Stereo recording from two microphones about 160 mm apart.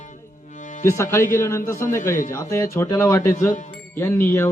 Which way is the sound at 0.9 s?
15° left (ahead or behind).